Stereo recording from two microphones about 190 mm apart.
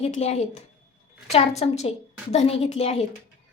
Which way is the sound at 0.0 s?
35° left (ahead or behind).